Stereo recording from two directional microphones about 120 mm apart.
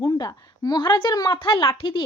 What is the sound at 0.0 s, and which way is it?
A woman's voice, 30° left (ahead or behind).